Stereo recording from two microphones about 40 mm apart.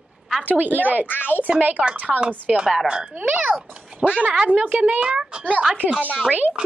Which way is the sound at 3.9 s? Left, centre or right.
Right.